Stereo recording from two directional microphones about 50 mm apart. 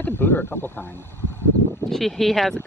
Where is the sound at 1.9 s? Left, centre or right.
Centre.